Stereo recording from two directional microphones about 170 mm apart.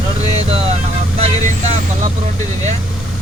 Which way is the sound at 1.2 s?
40° right (ahead or behind).